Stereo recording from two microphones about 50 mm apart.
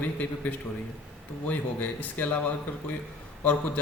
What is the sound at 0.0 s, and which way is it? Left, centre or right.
A man's voice, left.